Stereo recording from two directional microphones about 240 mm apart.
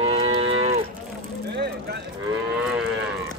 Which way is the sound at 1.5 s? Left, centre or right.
Right.